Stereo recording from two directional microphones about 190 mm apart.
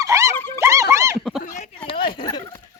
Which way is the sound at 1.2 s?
Centre (ahead or behind).